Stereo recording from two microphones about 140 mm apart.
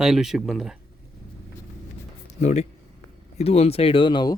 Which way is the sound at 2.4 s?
55° left (ahead or behind).